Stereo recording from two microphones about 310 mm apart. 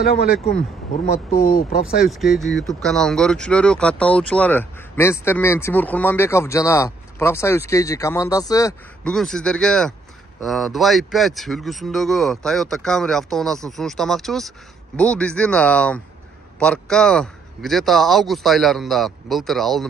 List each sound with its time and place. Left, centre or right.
0.0 s speech: left
2.0 s speech: centre